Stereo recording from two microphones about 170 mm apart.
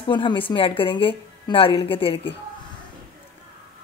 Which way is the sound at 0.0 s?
30° left (ahead or behind).